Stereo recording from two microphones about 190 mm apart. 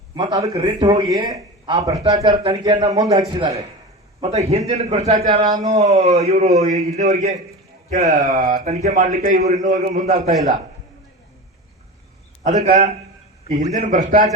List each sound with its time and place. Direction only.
0.2 s a man's voice: 20° right (ahead or behind)
4.2 s a man's voice: 35° right (ahead or behind)
5.4 s a man's voice: 20° right (ahead or behind)
5.7 s a man's voice: 40° right (ahead or behind)
12.4 s a man's voice: 40° right (ahead or behind)